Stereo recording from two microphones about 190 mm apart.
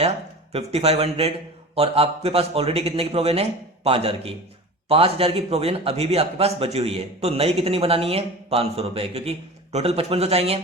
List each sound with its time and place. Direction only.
0.5 s a man's voice: 35° right (ahead or behind)